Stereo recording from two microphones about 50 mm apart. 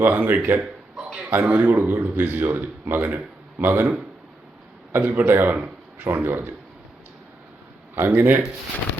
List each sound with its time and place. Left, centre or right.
0.0 s speech: right
0.6 s a sound: centre
1.3 s speech: right
4.9 s a man's voice: right
7.9 s speech: right